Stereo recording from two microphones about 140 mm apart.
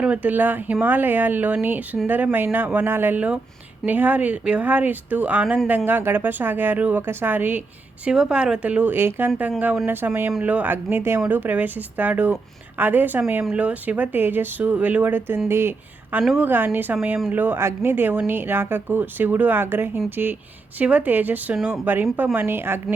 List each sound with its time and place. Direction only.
0.0 s speech: 10° right (ahead or behind)